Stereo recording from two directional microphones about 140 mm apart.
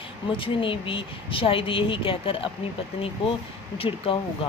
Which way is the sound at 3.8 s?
40° left (ahead or behind).